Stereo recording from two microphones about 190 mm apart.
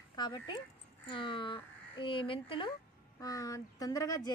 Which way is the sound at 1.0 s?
25° left (ahead or behind).